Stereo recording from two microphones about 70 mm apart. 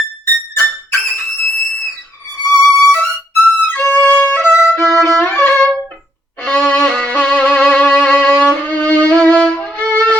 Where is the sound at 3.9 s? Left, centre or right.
Left.